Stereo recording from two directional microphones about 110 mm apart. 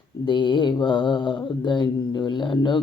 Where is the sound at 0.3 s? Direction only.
45° left (ahead or behind).